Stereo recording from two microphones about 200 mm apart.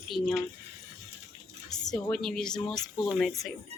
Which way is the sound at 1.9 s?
Centre (ahead or behind).